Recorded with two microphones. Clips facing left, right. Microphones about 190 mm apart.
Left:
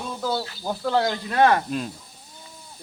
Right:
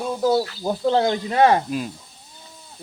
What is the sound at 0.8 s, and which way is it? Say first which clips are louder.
Speech: right 4 dB; 25° right (ahead or behind).